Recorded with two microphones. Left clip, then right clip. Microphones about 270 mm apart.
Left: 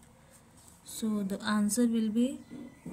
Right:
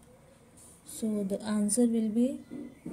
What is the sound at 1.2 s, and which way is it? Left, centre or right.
A woman's voice, centre.